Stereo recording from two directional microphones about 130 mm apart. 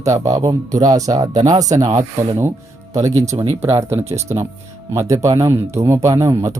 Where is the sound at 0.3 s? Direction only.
30° right (ahead or behind).